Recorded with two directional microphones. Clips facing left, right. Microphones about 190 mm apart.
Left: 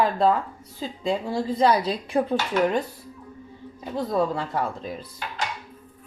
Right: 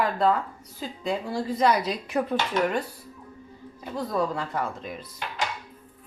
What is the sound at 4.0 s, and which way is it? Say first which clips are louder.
A woman's voice: left 3 dB; 25° left (ahead or behind).